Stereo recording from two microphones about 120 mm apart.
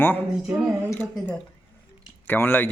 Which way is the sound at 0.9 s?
15° left (ahead or behind).